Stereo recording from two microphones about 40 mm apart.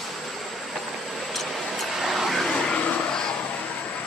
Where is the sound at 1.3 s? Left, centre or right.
Centre.